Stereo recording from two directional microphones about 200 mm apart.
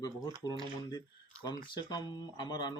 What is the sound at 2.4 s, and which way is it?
Speech, 20° left (ahead or behind).